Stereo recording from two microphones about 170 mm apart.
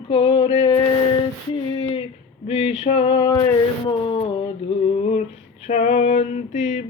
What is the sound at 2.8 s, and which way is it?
Male singing, 35° left (ahead or behind).